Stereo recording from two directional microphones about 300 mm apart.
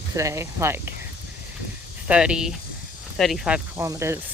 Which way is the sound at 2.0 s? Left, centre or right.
Centre.